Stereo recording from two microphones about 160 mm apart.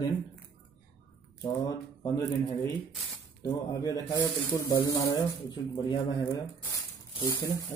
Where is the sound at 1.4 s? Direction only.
20° left (ahead or behind).